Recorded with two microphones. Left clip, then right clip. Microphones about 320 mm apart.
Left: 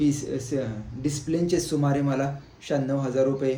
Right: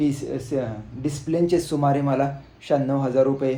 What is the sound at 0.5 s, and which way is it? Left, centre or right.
Speech, centre.